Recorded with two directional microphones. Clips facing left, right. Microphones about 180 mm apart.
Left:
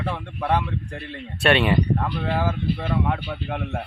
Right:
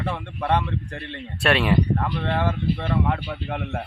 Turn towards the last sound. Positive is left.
turn(degrees=0)  # may be behind; listen again after turning